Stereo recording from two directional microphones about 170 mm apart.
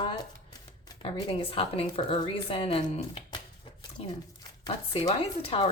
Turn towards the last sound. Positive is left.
turn(degrees=30)  # may be behind; listen again after turning